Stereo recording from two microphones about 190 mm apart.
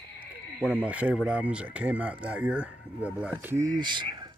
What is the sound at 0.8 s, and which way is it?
Speech, 5° right (ahead or behind).